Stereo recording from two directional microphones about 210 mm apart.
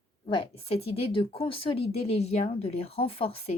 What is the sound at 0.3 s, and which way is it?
A woman's voice, 30° left (ahead or behind).